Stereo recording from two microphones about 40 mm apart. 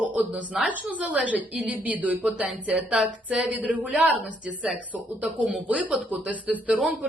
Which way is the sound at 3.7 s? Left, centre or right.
Right.